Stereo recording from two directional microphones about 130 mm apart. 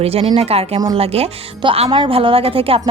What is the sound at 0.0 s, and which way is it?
A woman's voice, 50° right (ahead or behind).